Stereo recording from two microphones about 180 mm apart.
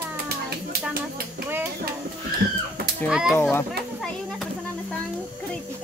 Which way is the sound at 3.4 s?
15° left (ahead or behind).